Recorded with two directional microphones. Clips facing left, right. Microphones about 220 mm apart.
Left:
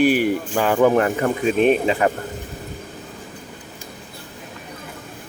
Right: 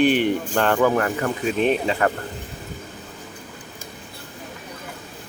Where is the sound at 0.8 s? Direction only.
20° left (ahead or behind).